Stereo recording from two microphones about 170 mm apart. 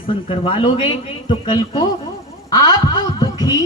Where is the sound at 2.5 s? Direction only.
25° left (ahead or behind).